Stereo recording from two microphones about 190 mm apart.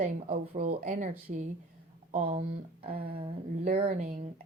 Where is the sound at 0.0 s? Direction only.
40° right (ahead or behind).